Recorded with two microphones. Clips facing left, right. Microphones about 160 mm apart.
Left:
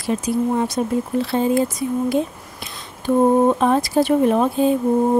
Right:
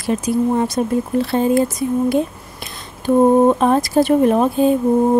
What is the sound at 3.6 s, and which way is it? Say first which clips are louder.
Speech: right 2 dB; 45° right (ahead or behind).